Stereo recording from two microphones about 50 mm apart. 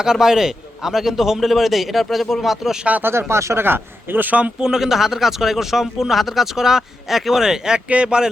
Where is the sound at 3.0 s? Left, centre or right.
Right.